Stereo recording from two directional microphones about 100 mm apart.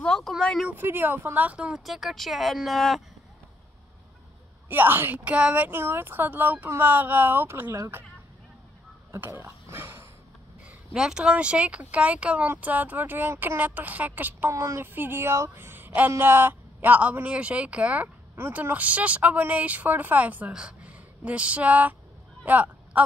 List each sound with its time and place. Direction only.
0.0 s speech: 5° left (ahead or behind)
0.7 s a woman's voice: 20° right (ahead or behind); by 3.0 s centre (ahead or behind)
4.6 s a woman's voice: 20° right (ahead or behind)
9.1 s speech: 20° right (ahead or behind)
10.9 s a woman's voice: 5° right (ahead or behind)
14.5 s a woman's voice: 30° right (ahead or behind)
22.4 s a sound: 15° right (ahead or behind)